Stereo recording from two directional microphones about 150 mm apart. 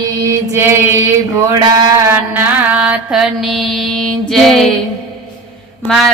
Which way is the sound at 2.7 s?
5° right (ahead or behind).